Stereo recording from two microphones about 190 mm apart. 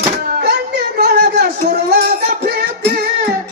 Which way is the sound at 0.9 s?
60° right (ahead or behind).